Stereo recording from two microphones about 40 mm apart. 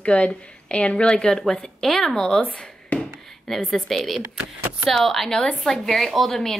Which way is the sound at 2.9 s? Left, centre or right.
Left.